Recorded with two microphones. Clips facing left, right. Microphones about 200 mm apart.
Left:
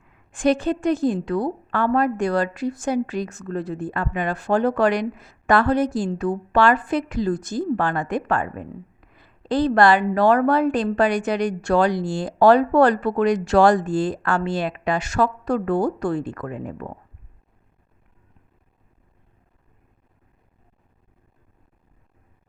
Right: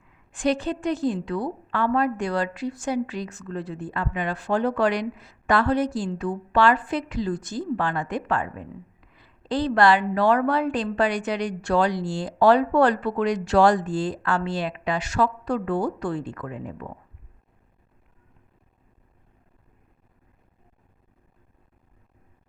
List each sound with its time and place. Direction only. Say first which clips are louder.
0.3 s a woman's voice: left 4 dB; 50° left (ahead or behind)